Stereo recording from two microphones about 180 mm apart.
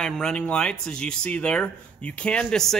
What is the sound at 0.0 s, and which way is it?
A man's voice, 5° left (ahead or behind).